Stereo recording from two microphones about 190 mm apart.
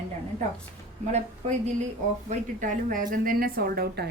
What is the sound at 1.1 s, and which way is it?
A woman's voice, 35° right (ahead or behind).